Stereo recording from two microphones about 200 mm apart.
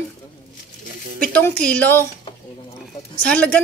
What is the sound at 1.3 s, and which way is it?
Speech, 5° left (ahead or behind).